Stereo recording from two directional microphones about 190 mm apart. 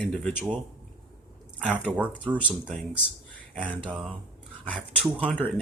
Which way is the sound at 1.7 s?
5° right (ahead or behind).